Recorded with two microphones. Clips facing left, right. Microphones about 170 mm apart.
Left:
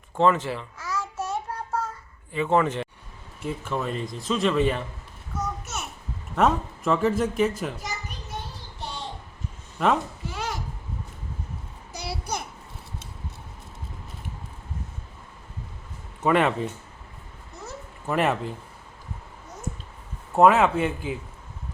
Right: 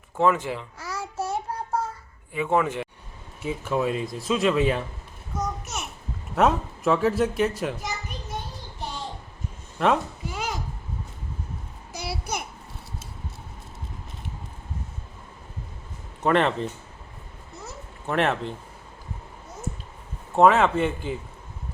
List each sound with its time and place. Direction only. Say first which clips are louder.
0.2 s a man's voice: left 1 dB; 10° right (ahead or behind)
0.8 s child singing: even; 35° right (ahead or behind)
2.3 s a man's voice: left 1 dB; 10° right (ahead or behind)
5.3 s babbling: right 1 dB; 15° right (ahead or behind)
6.3 s speech: right 1 dB; 5° right (ahead or behind)
9.7 s a woman's voice: right 1 dB; centre (ahead or behind)
10.2 s a sound: right 1 dB; 15° right (ahead or behind)
12.0 s babbling: even; 5° right (ahead or behind)
16.2 s speech: even; 5° left (ahead or behind)
18.0 s speech: even; 5° left (ahead or behind)
20.3 s speech: even; 5° left (ahead or behind)